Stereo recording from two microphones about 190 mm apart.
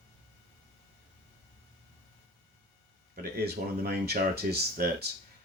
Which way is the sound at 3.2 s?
55° right (ahead or behind).